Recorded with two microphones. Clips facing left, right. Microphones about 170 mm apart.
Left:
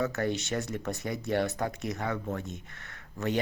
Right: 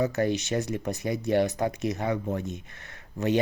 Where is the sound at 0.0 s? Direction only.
20° right (ahead or behind).